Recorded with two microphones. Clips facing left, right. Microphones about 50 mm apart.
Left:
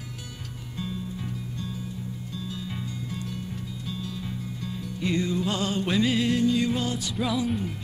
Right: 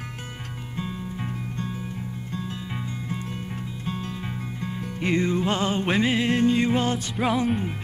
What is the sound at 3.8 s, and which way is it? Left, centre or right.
Music, right.